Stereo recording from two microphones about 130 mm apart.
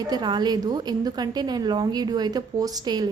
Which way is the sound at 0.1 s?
35° right (ahead or behind).